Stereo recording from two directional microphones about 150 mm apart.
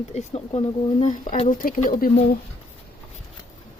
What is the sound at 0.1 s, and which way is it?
Speech, 45° left (ahead or behind).